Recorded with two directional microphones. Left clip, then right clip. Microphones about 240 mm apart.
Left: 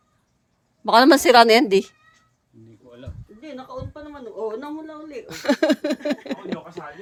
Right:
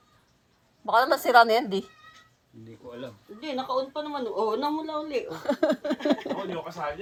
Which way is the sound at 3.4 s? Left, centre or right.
Centre.